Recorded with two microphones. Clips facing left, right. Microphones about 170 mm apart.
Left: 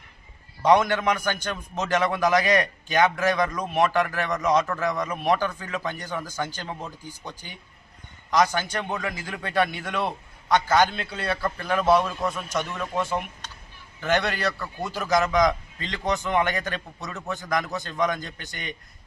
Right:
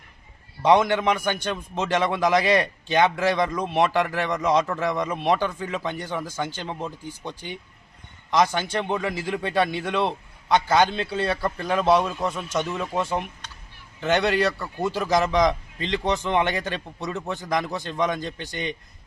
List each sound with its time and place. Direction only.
0.6 s a man's voice: 20° right (ahead or behind)